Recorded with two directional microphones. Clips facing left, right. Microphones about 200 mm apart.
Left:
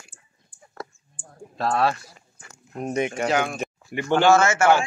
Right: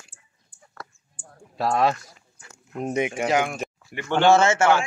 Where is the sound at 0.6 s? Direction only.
15° left (ahead or behind).